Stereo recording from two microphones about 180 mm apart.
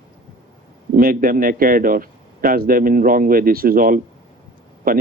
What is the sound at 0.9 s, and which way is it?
Speech, 50° right (ahead or behind).